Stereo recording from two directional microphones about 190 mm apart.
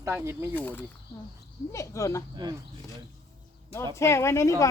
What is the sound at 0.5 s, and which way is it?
Speech, 10° left (ahead or behind).